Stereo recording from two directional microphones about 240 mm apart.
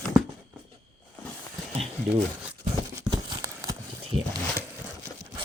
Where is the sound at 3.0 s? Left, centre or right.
Centre.